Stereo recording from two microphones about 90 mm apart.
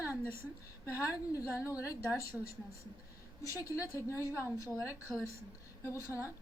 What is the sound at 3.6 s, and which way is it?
Speech, 35° left (ahead or behind).